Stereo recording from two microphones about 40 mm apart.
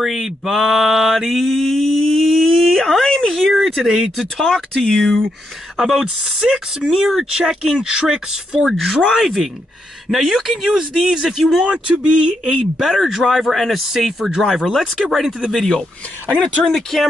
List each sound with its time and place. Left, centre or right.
0.0 s mantra: centre
3.0 s a sound: centre
3.3 s speech: centre
4.7 s speech: centre
5.9 s speech: centre
7.8 s speech: right
8.7 s speech: centre
11.6 s speech: right
12.7 s speech: centre
13.8 s speech: centre
16.3 s speech: centre